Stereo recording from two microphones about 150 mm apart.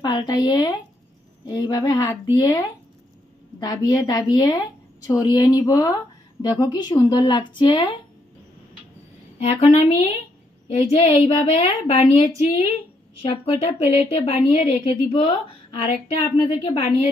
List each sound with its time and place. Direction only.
0.0 s a woman's voice: 30° left (ahead or behind)
9.4 s a woman's voice: 40° left (ahead or behind)
16.4 s a woman's voice: 45° left (ahead or behind)